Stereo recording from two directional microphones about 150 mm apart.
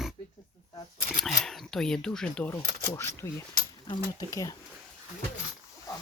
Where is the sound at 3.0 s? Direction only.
15° left (ahead or behind).